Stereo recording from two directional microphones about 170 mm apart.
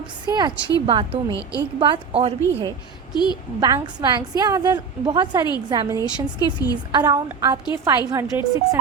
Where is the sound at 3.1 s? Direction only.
25° left (ahead or behind).